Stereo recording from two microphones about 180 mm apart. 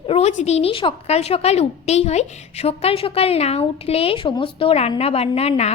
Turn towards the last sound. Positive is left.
turn(degrees=35)  # may be behind; listen again after turning